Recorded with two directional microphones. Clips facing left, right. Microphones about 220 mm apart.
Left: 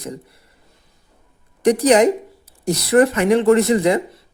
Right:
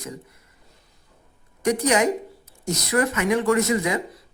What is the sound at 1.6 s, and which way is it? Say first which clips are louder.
Speech: left 7 dB; 35° left (ahead or behind).